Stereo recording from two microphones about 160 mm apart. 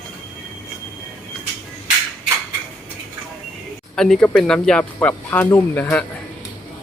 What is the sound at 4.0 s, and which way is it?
Speech, 5° left (ahead or behind).